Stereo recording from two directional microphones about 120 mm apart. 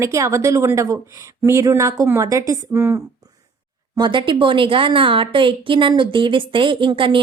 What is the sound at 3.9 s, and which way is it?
A woman's voice, 40° right (ahead or behind).